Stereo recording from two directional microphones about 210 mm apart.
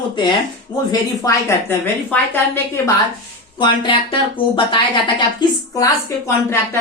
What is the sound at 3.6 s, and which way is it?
A woman's voice, 20° left (ahead or behind).